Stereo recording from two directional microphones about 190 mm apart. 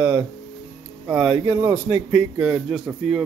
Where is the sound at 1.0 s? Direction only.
5° right (ahead or behind).